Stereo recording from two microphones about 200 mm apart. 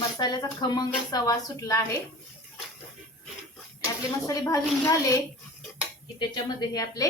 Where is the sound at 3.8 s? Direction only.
15° left (ahead or behind).